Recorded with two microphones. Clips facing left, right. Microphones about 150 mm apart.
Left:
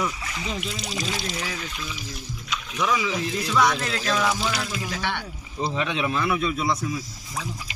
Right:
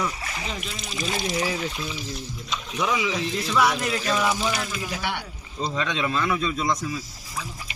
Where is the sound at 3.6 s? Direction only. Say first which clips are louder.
Even; 10° right (ahead or behind).